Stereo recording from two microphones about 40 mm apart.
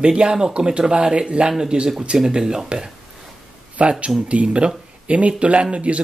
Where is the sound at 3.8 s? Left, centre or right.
Right.